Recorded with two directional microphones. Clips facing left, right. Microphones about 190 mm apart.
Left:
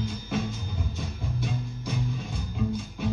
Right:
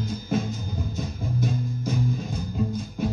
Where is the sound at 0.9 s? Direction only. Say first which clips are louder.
Right 5 dB; 40° right (ahead or behind).